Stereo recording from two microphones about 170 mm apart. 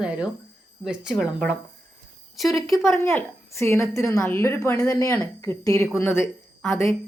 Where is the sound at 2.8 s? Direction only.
15° left (ahead or behind).